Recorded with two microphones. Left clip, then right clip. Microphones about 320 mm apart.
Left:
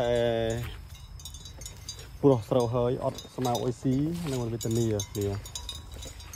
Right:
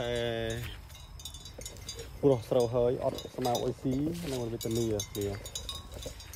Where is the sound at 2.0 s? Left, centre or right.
Centre.